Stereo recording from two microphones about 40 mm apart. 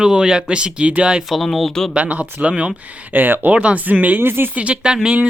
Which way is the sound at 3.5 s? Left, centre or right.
Right.